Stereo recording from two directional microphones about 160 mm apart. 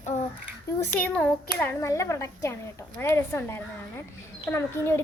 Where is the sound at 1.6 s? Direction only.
15° left (ahead or behind).